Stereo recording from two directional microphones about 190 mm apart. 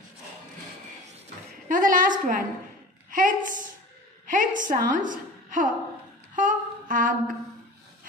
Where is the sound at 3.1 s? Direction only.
45° right (ahead or behind).